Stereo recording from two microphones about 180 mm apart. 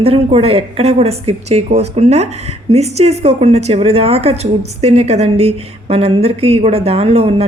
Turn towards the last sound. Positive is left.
turn(degrees=-35)  # may be behind; listen again after turning